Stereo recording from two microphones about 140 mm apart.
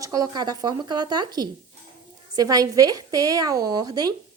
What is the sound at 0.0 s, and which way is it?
A woman's voice, 25° right (ahead or behind).